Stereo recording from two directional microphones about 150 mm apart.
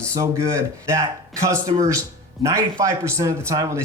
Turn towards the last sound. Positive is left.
turn(degrees=-20)  # may be behind; listen again after turning